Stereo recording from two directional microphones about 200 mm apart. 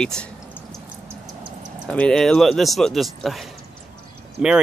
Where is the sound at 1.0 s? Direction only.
20° right (ahead or behind).